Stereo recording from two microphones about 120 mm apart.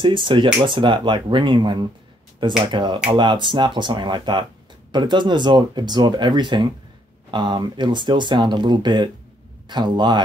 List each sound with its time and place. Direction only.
0.0 s speech: 45° right (ahead or behind)